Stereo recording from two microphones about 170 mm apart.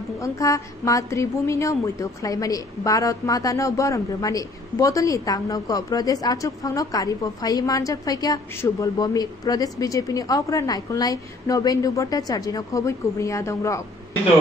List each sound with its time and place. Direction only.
0.2 s a woman's voice: 20° left (ahead or behind)